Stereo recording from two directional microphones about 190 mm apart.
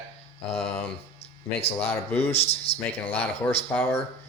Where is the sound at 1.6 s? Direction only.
30° left (ahead or behind).